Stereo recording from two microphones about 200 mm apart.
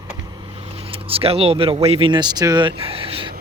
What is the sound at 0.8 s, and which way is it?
Speech, 30° right (ahead or behind).